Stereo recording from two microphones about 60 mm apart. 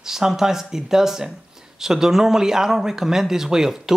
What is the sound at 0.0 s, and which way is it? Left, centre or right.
A man's voice, centre.